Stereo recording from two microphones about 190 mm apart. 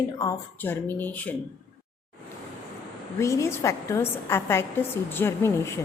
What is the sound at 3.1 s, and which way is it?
A woman's voice, 15° left (ahead or behind).